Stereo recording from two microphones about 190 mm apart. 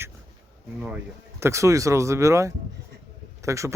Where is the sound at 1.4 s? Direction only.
15° right (ahead or behind).